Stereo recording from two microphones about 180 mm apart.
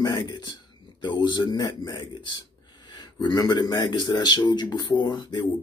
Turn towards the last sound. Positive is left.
turn(degrees=25)  # may be behind; listen again after turning